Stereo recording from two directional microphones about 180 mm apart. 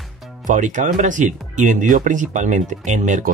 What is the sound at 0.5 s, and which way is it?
Speech, 45° right (ahead or behind).